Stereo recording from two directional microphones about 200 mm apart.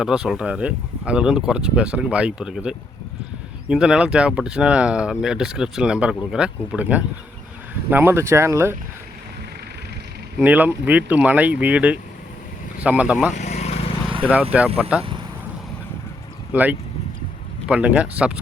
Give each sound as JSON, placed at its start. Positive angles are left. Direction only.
{"t": 0.0, "sound": "speech", "side_deg": -5}
{"t": 10.3, "sound": "speech", "side_deg": -10}
{"t": 13.3, "sound": "vehicle", "side_deg": 35}
{"t": 14.2, "sound": "speech", "side_deg": -10}
{"t": 16.5, "sound": "speech", "side_deg": -10}